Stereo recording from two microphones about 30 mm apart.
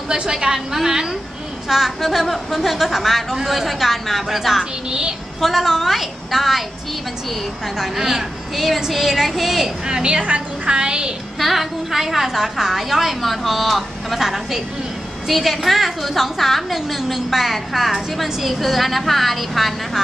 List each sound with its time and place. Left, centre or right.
0.1 s a child's voice: right
2.0 s a woman's voice: centre
7.7 s a woman's voice: centre
9.8 s a child's voice: right
10.2 s a woman's voice: right
10.7 s a child's voice: right
11.3 s a woman's voice: centre
13.2 s a woman's voice: centre